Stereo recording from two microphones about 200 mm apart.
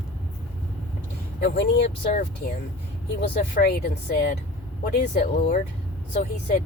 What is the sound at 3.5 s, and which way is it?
Speech, 50° left (ahead or behind).